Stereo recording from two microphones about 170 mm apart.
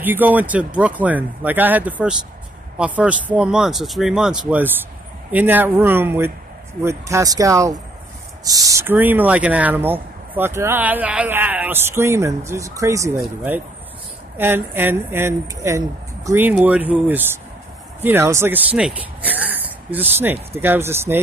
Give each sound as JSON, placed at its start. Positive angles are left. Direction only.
{"t": 0.0, "sound": "speech", "side_deg": -10}